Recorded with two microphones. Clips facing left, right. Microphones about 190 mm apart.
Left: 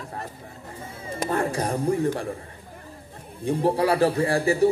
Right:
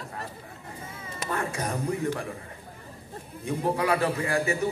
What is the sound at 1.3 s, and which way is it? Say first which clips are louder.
Speech: left 5 dB; 30° left (ahead or behind).